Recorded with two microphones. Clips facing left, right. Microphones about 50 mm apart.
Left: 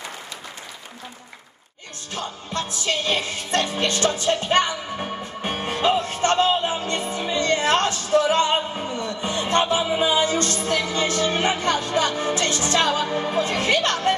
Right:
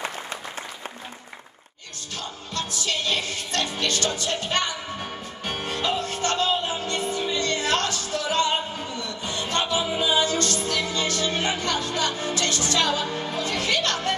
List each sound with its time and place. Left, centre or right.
2.1 s music: left
12.2 s speech: left